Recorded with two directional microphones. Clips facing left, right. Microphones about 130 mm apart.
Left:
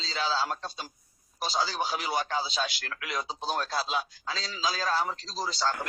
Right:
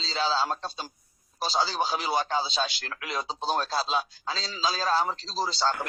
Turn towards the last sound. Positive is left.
turn(degrees=-30)  # may be behind; listen again after turning